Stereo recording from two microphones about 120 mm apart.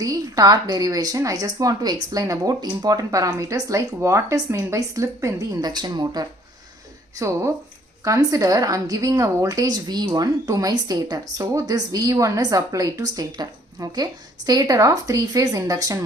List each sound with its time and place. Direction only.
0.0 s a woman's voice: 30° right (ahead or behind)
7.2 s a woman's voice: 25° right (ahead or behind)